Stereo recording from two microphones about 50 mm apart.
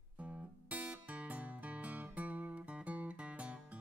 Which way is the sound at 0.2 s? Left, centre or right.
Right.